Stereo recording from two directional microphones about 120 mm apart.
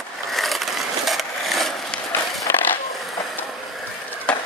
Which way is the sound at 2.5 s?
20° left (ahead or behind).